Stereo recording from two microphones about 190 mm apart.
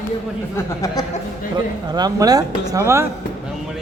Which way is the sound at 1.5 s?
20° right (ahead or behind).